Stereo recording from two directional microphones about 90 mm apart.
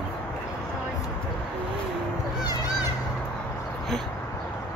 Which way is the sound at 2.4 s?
45° left (ahead or behind).